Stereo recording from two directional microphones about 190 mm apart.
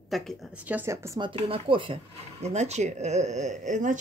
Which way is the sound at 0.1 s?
Centre (ahead or behind).